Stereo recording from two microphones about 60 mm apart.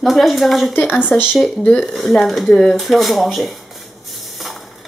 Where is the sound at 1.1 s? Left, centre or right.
Centre.